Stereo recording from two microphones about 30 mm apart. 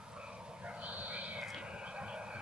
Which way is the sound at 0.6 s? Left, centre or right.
Right.